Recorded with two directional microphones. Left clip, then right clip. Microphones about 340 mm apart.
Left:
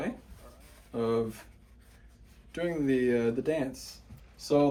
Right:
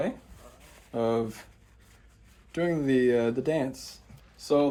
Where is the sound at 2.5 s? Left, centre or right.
Right.